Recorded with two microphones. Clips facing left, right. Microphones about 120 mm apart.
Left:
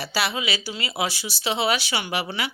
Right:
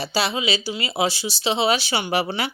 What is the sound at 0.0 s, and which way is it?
Speech, 25° right (ahead or behind).